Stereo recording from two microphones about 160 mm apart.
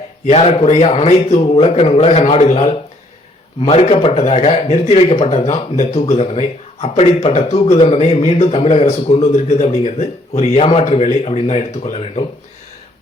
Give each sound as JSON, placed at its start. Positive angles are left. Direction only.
{"t": 0.3, "sound": "a man's voice", "side_deg": 40}